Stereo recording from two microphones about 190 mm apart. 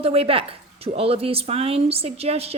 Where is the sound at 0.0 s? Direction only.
30° right (ahead or behind).